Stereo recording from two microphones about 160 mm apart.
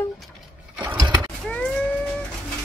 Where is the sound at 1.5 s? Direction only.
5° left (ahead or behind).